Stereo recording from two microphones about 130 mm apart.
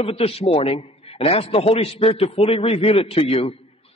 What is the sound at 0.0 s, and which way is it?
A man's voice, 50° left (ahead or behind).